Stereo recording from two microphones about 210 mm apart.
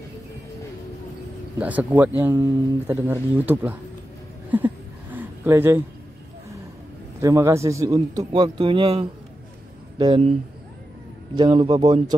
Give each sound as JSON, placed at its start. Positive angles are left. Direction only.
{"t": 1.6, "sound": "speech", "side_deg": -5}
{"t": 4.5, "sound": "a sound", "side_deg": -10}
{"t": 7.2, "sound": "a man's voice", "side_deg": -15}
{"t": 11.3, "sound": "a man's voice", "side_deg": -20}